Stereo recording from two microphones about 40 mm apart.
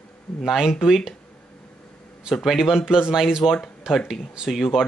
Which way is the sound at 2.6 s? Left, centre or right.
Centre.